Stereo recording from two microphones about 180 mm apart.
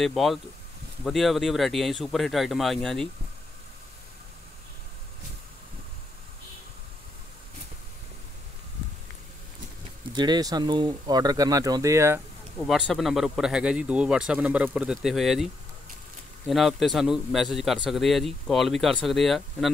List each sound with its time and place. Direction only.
0.0 s speech: centre (ahead or behind)
10.1 s speech: 25° right (ahead or behind)
12.5 s speech: centre (ahead or behind)
16.4 s speech: centre (ahead or behind)